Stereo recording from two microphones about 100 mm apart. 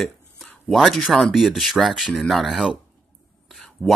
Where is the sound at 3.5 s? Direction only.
Centre (ahead or behind).